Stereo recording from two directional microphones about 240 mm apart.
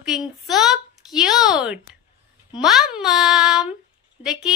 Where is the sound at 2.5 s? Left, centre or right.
Centre.